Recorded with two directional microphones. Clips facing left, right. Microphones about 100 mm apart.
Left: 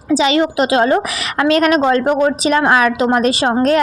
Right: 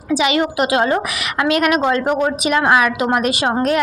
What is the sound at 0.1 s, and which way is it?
A woman's voice, 30° left (ahead or behind).